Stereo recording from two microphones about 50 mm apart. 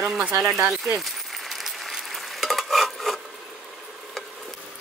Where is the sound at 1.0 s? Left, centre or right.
Centre.